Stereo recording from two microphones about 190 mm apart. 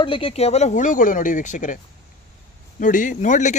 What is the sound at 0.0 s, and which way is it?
Speech, 30° left (ahead or behind).